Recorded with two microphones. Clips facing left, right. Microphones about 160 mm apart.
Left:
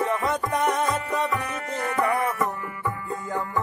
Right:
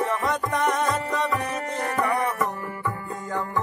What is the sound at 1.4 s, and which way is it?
Music, 35° right (ahead or behind).